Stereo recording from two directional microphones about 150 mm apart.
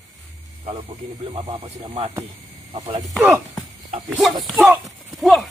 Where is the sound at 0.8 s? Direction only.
40° right (ahead or behind).